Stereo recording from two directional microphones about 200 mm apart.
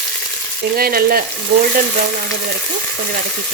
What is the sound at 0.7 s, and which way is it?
Speech, 45° right (ahead or behind).